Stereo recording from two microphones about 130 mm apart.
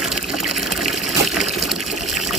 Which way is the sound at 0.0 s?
5° right (ahead or behind).